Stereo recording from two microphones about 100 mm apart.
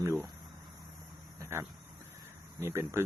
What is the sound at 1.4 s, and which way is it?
A man's voice, 25° right (ahead or behind).